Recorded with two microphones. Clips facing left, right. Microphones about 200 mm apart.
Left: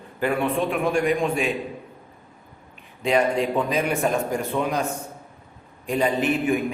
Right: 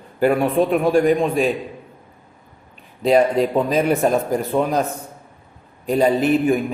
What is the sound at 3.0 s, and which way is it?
A man's voice, 35° right (ahead or behind).